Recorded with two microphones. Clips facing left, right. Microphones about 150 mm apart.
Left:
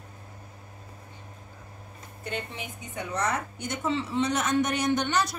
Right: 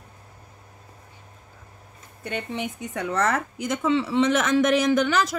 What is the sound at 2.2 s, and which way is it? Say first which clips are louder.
Speech: right 6 dB; 65° right (ahead or behind).